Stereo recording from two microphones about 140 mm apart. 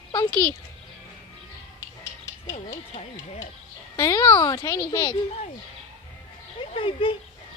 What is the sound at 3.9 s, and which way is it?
Speech, 25° left (ahead or behind).